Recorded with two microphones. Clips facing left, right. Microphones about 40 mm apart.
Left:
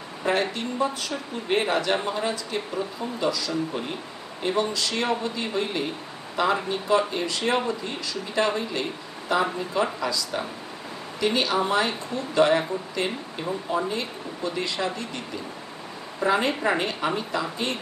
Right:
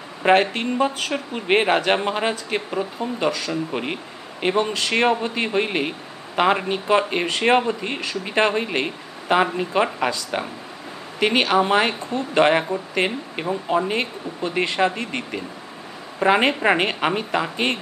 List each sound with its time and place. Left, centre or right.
0.2 s a man's voice: right